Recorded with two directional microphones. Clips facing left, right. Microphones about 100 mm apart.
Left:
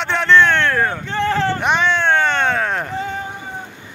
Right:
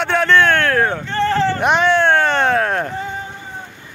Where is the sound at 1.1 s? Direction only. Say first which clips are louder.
Right 2 dB; 10° left (ahead or behind).